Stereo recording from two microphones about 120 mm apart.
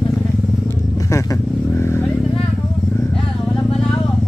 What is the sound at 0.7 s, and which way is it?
Wild animals, 25° left (ahead or behind).